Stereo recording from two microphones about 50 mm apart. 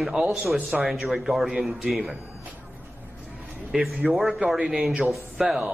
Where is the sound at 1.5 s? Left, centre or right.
Centre.